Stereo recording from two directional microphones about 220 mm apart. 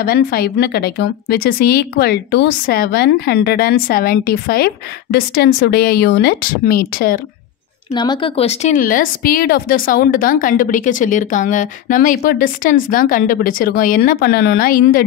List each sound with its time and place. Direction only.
0.0 s a woman's voice: 45° left (ahead or behind)
7.9 s speech: 20° left (ahead or behind); by 15.0 s 40° left (ahead or behind)